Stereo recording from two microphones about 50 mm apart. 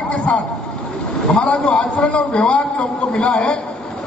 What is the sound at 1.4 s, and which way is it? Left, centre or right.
A man's voice, centre.